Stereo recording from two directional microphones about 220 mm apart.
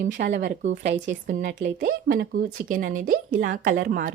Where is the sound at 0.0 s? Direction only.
35° right (ahead or behind).